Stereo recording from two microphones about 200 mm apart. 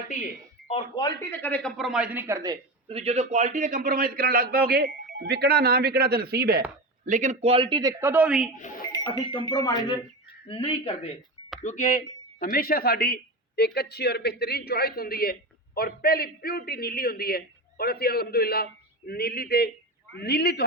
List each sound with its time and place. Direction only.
0.7 s speech: 20° left (ahead or behind)
1.3 s a man's voice: 10° left (ahead or behind); by 6.6 s 50° right (ahead or behind)
7.0 s speech: 35° right (ahead or behind); by 8.4 s 5° right (ahead or behind)
8.5 s speech: 40° left (ahead or behind)
8.8 s a man's voice: 20° left (ahead or behind); by 20.7 s 55° left (ahead or behind)